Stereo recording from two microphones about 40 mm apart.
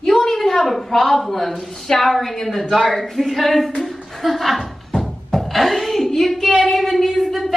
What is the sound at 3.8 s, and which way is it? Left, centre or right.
Beatboxing, centre.